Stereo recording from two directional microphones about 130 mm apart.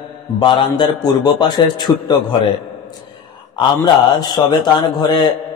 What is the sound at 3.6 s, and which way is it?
A man's voice, 30° left (ahead or behind).